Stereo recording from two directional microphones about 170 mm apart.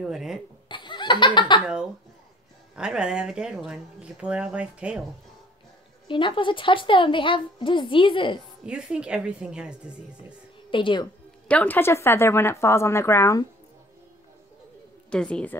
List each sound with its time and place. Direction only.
0.0 s speech: centre (ahead or behind)
0.7 s laughter: 25° left (ahead or behind)
2.7 s speech: 5° right (ahead or behind)
6.0 s a woman's voice: 30° left (ahead or behind)
8.6 s speech: 5° right (ahead or behind)
10.7 s a woman's voice: 30° left (ahead or behind)
11.4 s speech: 10° left (ahead or behind)
15.0 s speech: 5° left (ahead or behind)